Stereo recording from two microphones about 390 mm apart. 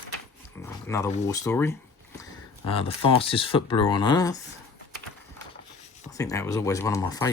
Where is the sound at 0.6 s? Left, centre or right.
Centre.